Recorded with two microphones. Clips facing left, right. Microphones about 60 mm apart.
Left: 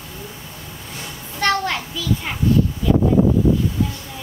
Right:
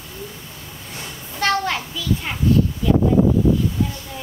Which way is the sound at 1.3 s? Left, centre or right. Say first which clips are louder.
Even; centre.